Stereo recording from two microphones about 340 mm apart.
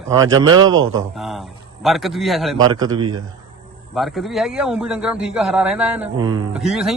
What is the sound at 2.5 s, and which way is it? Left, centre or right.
Speech, centre.